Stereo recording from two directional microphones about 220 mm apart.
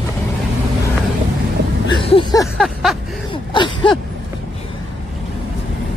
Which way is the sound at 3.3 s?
20° left (ahead or behind).